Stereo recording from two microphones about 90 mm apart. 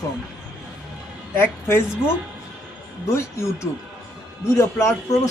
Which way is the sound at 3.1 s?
30° left (ahead or behind).